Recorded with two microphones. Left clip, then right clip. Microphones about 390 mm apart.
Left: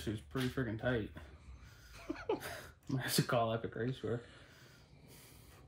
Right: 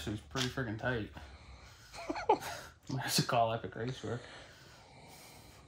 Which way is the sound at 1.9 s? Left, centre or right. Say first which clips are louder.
Right 8 dB; centre.